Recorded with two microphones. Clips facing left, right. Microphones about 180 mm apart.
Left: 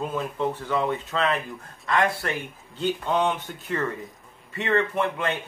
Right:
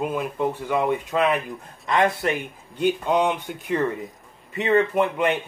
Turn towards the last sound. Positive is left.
turn(degrees=-15)  # may be behind; listen again after turning